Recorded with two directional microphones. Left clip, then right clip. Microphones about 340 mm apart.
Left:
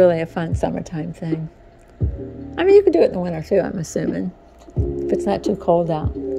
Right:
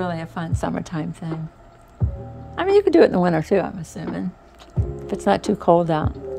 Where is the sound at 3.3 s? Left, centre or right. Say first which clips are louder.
Right 2 dB; centre.